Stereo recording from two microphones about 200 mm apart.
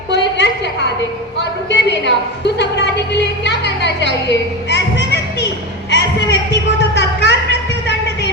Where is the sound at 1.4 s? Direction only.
60° left (ahead or behind).